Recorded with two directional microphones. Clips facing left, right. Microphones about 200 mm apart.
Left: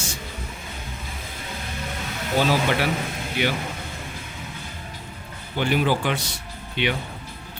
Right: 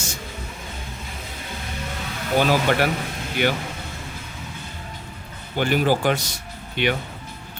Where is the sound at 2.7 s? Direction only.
50° right (ahead or behind).